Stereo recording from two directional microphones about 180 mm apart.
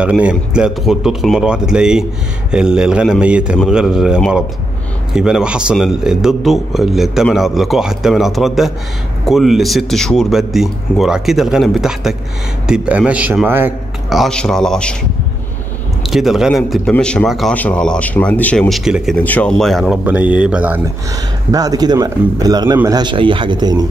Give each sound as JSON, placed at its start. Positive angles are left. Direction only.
{"t": 0.0, "sound": "a man's voice", "side_deg": -5}
{"t": 16.0, "sound": "a man's voice", "side_deg": 0}
{"t": 21.5, "sound": "speech", "side_deg": -20}